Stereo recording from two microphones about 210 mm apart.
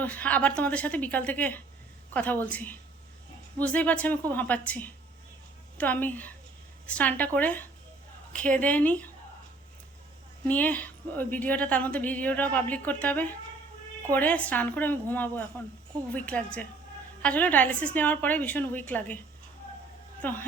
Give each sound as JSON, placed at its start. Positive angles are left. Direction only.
{"t": 0.0, "sound": "a woman's voice", "side_deg": 5}
{"t": 10.4, "sound": "a woman's voice", "side_deg": 5}
{"t": 20.2, "sound": "a woman's voice", "side_deg": 10}